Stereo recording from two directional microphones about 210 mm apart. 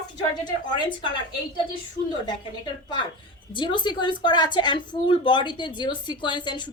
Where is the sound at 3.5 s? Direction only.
20° left (ahead or behind).